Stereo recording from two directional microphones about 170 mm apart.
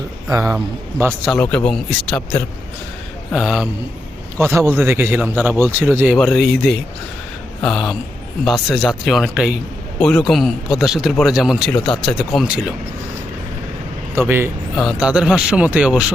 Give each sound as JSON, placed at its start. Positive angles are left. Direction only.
{"t": 0.3, "sound": "a man's voice", "side_deg": -20}
{"t": 1.3, "sound": "speech", "side_deg": 5}
{"t": 4.4, "sound": "a man's voice", "side_deg": -15}
{"t": 6.1, "sound": "speech", "side_deg": 0}
{"t": 14.2, "sound": "a man's voice", "side_deg": -15}